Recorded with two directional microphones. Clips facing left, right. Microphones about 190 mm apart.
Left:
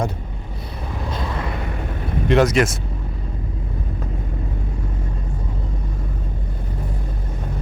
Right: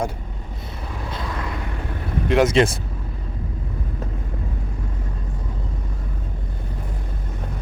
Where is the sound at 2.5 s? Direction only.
30° right (ahead or behind).